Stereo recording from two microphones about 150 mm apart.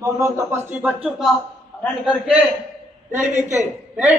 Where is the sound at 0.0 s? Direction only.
20° right (ahead or behind).